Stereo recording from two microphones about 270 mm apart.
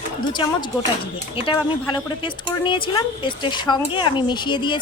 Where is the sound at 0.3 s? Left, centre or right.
Centre.